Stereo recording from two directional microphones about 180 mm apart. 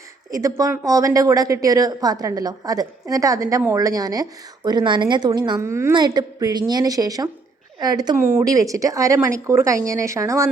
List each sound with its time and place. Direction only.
0.3 s a woman's voice: 20° right (ahead or behind)